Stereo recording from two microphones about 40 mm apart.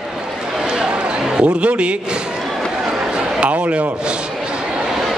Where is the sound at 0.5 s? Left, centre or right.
Right.